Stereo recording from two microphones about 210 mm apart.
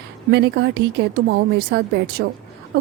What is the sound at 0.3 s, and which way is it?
A woman's voice, 55° right (ahead or behind).